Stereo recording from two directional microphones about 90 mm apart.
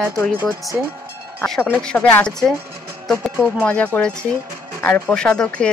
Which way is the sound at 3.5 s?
15° left (ahead or behind).